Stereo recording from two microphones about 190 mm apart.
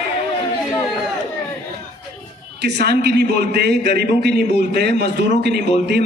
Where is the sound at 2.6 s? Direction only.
60° right (ahead or behind).